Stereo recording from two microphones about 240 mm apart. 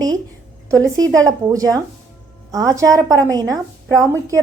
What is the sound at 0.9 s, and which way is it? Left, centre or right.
A woman's voice, centre.